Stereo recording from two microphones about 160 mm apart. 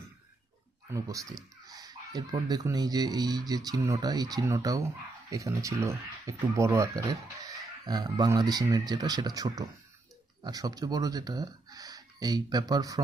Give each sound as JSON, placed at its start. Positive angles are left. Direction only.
{"t": 0.9, "sound": "speech", "side_deg": -20}